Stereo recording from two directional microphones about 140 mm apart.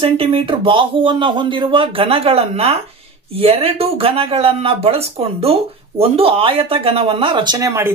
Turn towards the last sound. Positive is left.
turn(degrees=-20)  # may be behind; listen again after turning